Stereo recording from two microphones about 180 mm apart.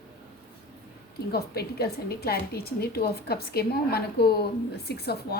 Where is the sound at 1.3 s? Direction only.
60° left (ahead or behind).